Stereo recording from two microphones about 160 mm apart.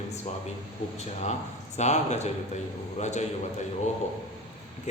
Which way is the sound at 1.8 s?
45° left (ahead or behind).